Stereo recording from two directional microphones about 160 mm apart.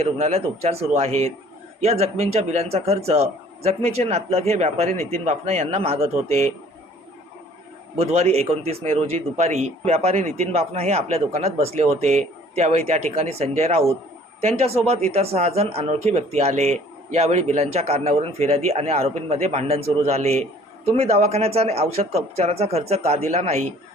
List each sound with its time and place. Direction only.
0.0 s speech: 40° right (ahead or behind)
7.9 s speech: 40° right (ahead or behind)